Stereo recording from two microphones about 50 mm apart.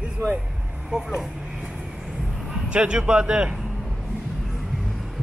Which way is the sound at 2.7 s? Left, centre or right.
Right.